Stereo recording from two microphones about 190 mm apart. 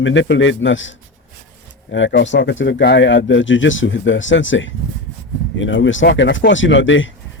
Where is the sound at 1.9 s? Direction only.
70° left (ahead or behind).